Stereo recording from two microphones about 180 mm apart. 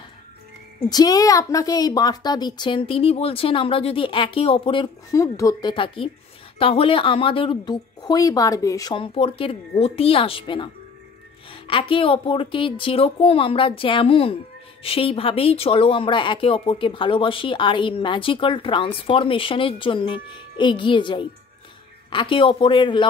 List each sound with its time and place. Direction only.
0.8 s speech: 20° left (ahead or behind)
5.1 s speech: 20° left (ahead or behind)